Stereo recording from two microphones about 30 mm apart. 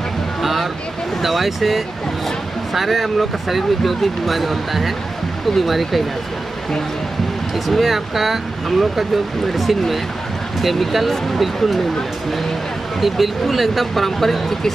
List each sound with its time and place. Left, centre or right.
0.4 s a sound: centre
1.2 s speech: centre
7.5 s speech: centre
13.0 s speech: centre